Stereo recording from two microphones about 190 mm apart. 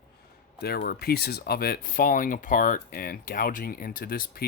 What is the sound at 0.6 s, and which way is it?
Speech, 55° left (ahead or behind).